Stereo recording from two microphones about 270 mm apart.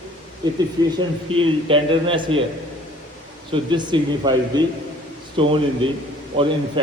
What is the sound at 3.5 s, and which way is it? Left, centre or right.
A man's voice, centre.